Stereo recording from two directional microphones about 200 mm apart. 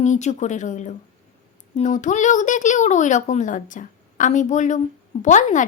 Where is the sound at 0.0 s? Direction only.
35° left (ahead or behind).